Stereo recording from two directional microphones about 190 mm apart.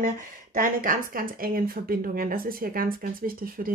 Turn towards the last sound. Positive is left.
turn(degrees=-50)  # may be behind; listen again after turning